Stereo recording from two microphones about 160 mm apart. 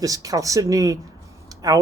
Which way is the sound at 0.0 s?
20° right (ahead or behind).